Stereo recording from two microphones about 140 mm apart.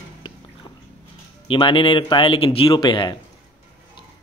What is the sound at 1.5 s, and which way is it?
Speech, 35° left (ahead or behind).